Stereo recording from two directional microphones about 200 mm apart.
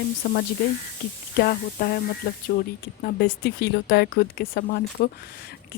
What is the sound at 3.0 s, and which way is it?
Speech, 50° left (ahead or behind).